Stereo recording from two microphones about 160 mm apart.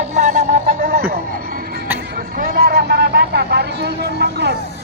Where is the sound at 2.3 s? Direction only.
65° right (ahead or behind); by 4.5 s 90° right.